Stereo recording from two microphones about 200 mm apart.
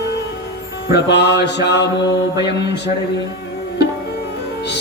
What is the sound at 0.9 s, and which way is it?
Speech, 60° left (ahead or behind).